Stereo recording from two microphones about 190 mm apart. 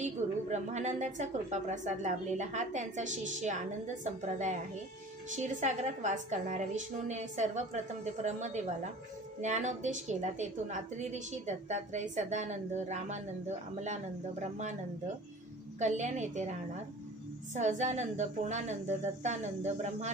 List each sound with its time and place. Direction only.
0.0 s a woman's voice: 35° right (ahead or behind)
15.8 s a woman's voice: 40° right (ahead or behind)
17.6 s a woman's voice: 40° right (ahead or behind)